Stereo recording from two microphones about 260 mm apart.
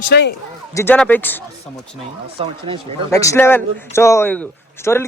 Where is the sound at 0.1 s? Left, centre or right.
Left.